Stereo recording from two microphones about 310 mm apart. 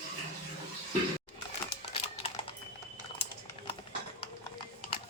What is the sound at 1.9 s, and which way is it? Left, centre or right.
Typing, centre.